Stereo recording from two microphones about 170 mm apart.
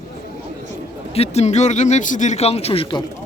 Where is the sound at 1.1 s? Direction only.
40° left (ahead or behind).